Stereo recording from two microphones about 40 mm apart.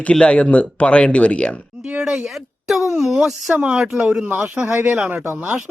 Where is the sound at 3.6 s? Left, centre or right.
Right.